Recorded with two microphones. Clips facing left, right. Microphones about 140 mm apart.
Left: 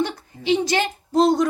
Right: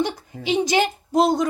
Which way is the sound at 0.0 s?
15° right (ahead or behind).